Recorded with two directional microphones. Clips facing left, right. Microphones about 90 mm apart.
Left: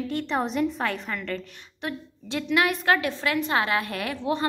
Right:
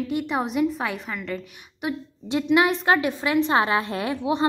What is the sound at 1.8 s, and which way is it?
A woman's voice, 20° right (ahead or behind).